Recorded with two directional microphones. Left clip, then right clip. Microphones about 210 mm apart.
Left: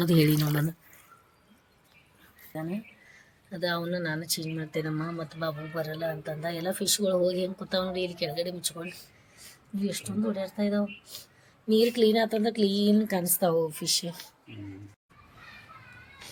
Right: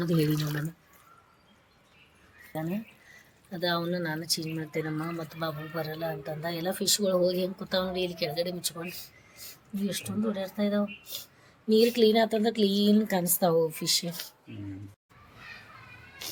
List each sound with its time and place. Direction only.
0.0 s speech: 35° left (ahead or behind)
2.5 s speech: centre (ahead or behind)